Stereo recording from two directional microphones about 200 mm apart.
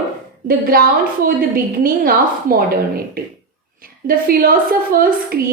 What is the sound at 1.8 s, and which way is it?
Speech, 45° right (ahead or behind).